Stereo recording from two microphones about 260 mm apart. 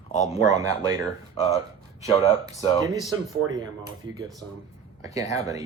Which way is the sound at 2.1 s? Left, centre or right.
Left.